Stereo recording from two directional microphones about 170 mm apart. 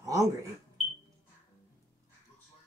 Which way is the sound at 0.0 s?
20° right (ahead or behind).